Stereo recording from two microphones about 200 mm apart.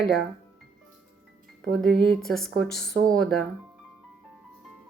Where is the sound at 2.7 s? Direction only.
55° left (ahead or behind).